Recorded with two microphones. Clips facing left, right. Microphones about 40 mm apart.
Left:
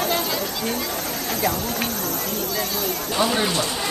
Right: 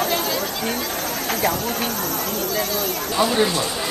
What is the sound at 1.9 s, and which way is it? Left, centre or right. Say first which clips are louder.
Speech: right 2 dB; right.